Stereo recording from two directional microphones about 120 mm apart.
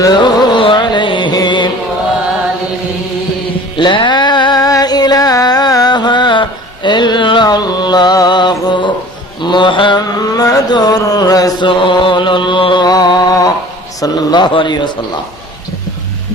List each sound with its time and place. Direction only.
0.0 s music: 35° left (ahead or behind)
3.8 s a sound: 40° left (ahead or behind)
9.4 s mantra: 40° left (ahead or behind)
11.7 s chant: 45° left (ahead or behind)
14.0 s a man's voice: 35° left (ahead or behind)